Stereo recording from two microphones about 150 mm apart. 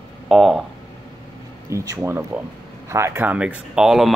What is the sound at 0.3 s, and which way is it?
Speech, centre (ahead or behind).